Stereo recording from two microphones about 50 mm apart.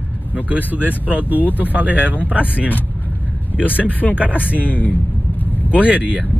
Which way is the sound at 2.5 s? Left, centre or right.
Left.